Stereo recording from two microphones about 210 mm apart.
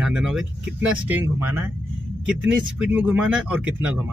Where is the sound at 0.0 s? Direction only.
5° right (ahead or behind).